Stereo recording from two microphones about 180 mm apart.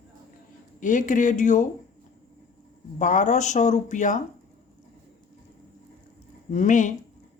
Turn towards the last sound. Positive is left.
turn(degrees=45)  # may be behind; listen again after turning